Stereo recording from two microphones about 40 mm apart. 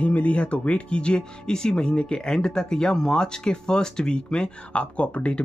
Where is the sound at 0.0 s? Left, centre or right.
Left.